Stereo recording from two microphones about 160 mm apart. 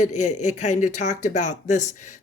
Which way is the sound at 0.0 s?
50° left (ahead or behind).